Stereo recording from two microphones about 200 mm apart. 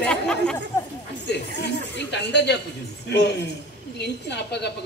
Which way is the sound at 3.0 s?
55° left (ahead or behind).